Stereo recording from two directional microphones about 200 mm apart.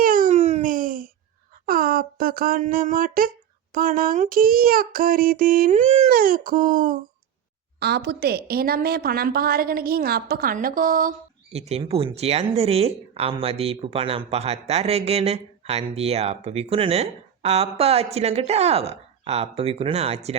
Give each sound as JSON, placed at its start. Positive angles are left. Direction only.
{"t": 0.0, "sound": "a sound", "side_deg": -45}
{"t": 3.8, "sound": "a woman's voice", "side_deg": -45}
{"t": 7.8, "sound": "a woman's voice", "side_deg": -55}
{"t": 11.5, "sound": "speech", "side_deg": -30}